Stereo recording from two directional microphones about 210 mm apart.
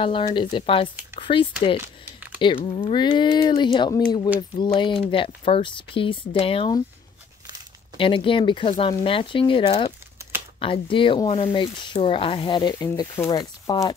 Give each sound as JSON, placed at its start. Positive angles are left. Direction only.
{"t": 0.0, "sound": "speech", "side_deg": 25}
{"t": 8.0, "sound": "speech", "side_deg": 25}